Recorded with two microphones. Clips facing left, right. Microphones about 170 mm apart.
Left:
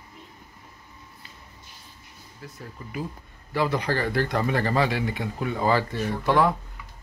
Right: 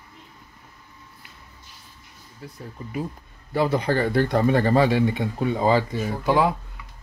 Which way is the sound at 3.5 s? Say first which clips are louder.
Right 3 dB; 30° right (ahead or behind).